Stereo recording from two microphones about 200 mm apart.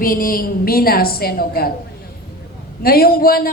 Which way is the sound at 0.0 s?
45° left (ahead or behind).